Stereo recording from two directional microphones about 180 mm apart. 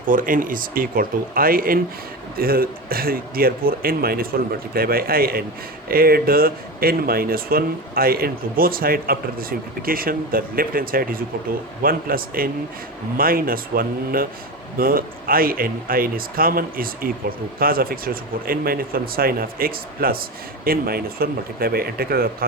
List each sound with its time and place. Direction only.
0.1 s speech: 50° right (ahead or behind)